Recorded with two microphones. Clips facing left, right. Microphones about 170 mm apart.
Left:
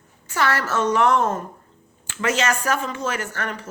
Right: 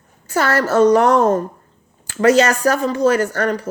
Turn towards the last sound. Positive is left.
turn(degrees=-40)  # may be behind; listen again after turning